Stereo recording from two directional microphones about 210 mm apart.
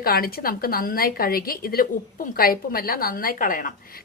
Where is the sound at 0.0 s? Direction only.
45° left (ahead or behind).